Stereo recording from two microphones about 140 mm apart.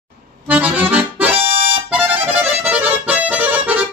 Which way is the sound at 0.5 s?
10° right (ahead or behind).